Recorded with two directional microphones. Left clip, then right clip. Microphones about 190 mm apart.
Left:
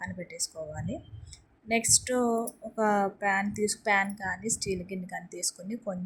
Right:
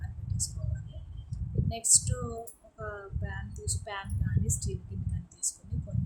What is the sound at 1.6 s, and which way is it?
A woman's voice, 30° left (ahead or behind).